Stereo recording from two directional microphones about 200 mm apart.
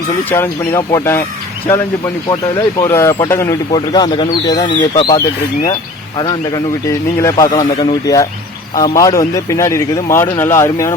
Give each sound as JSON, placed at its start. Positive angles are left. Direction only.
{"t": 0.3, "sound": "speech", "side_deg": 10}
{"t": 2.3, "sound": "speech", "side_deg": 20}